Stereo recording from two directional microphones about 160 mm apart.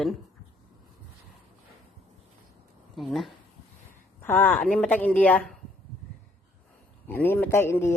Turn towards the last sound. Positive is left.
turn(degrees=15)  # may be behind; listen again after turning